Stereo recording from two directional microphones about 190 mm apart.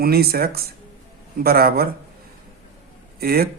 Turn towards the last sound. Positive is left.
turn(degrees=-55)  # may be behind; listen again after turning